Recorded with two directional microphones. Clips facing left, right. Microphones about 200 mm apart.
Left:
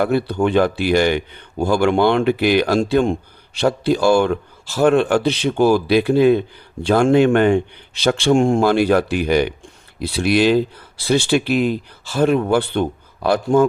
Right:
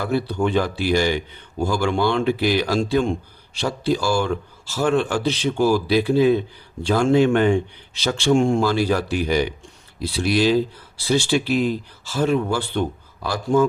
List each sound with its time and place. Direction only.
0.0 s a man's voice: 60° left (ahead or behind)